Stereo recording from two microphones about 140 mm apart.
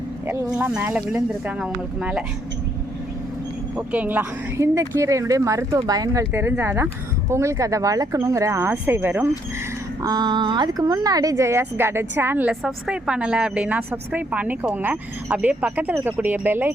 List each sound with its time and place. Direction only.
0.5 s speech: 10° right (ahead or behind)
3.8 s speech: 10° right (ahead or behind)
10.0 s speech: 30° right (ahead or behind); by 16.7 s 15° right (ahead or behind)